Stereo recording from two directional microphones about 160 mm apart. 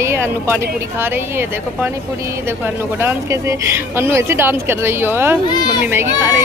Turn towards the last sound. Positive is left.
turn(degrees=-15)  # may be behind; listen again after turning